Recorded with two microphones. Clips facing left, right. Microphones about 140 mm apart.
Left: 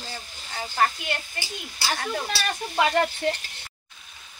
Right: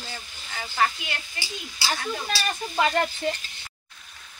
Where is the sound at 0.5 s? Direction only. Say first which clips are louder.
Left 2 dB; 25° left (ahead or behind).